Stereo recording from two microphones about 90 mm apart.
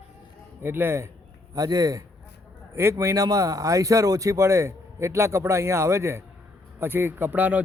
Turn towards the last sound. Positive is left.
turn(degrees=-20)  # may be behind; listen again after turning